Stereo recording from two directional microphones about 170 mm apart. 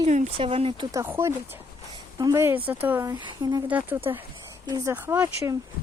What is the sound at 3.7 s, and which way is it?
Speech, 10° right (ahead or behind).